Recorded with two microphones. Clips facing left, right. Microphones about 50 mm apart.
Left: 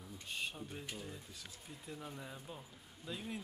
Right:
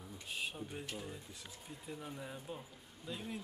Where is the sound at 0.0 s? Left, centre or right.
Centre.